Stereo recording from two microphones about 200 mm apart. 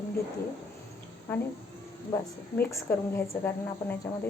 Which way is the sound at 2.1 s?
15° left (ahead or behind).